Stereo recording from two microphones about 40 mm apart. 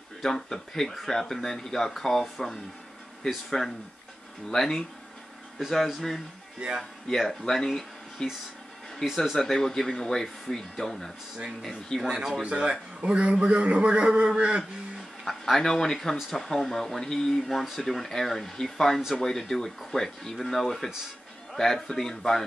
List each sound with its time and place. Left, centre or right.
0.2 s speech: centre
5.9 s speech: centre
7.1 s speech: centre
9.5 s speech: centre
12.0 s speech: centre
12.4 s a man's voice: right
15.2 s speech: centre
17.4 s speech: centre
18.9 s speech: centre